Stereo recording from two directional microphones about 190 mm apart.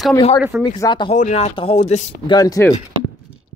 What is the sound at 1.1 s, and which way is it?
Speech, 35° left (ahead or behind).